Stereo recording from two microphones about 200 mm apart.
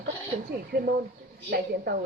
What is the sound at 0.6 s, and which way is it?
Speech, 50° right (ahead or behind).